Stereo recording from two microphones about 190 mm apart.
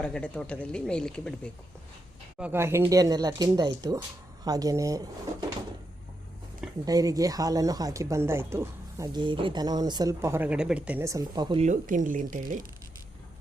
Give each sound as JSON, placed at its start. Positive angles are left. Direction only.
{"t": 0.0, "sound": "speech", "side_deg": 5}
{"t": 2.4, "sound": "speech", "side_deg": -10}
{"t": 6.8, "sound": "speech", "side_deg": -20}
{"t": 11.6, "sound": "speech", "side_deg": -40}